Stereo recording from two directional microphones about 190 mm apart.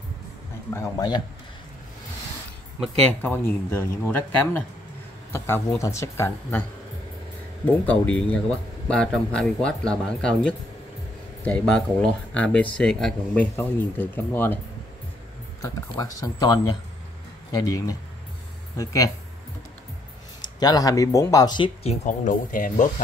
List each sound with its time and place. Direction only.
0.7 s speech: 20° left (ahead or behind)
2.8 s speech: 10° left (ahead or behind)
7.6 s speech: 5° left (ahead or behind)
15.6 s speech: 20° left (ahead or behind)
20.5 s speech: 20° left (ahead or behind); by 22.8 s 45° left (ahead or behind)